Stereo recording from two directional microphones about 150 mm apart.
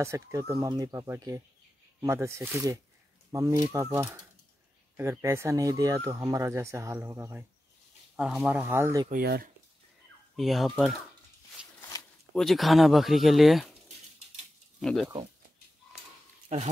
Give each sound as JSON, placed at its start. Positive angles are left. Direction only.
{"t": 0.0, "sound": "speech", "side_deg": -20}
{"t": 8.2, "sound": "speech", "side_deg": -5}
{"t": 9.1, "sound": "speech", "side_deg": -80}
{"t": 10.3, "sound": "speech", "side_deg": 0}
{"t": 11.6, "sound": "a sound", "side_deg": -5}
{"t": 12.4, "sound": "speech", "side_deg": 0}
{"t": 14.8, "sound": "speech", "side_deg": 5}